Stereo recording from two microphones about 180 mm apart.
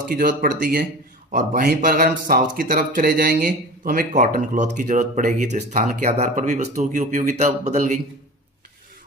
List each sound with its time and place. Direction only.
0.1 s speech: 50° right (ahead or behind)